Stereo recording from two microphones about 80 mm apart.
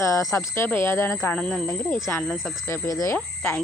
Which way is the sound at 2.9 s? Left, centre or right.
Left.